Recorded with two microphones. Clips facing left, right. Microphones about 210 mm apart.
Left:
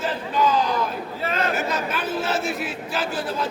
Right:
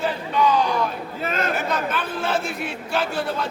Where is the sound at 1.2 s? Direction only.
50° right (ahead or behind).